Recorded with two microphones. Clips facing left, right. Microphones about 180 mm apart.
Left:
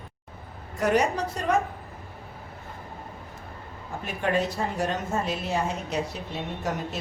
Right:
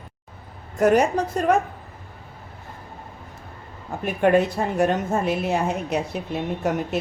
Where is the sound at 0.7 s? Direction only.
50° right (ahead or behind).